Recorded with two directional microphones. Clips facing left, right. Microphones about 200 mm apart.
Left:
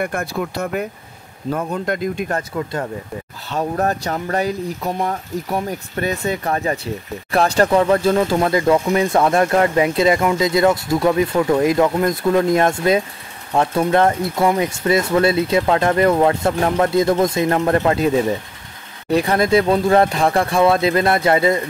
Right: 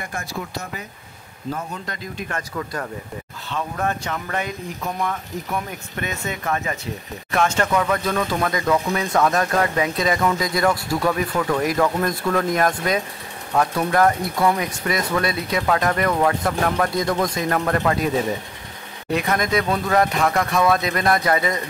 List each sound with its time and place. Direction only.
0.0 s speech: 60° left (ahead or behind)
2.5 s speech: 25° left (ahead or behind)
3.4 s speech: 40° left (ahead or behind)
19.1 s speech: 30° left (ahead or behind)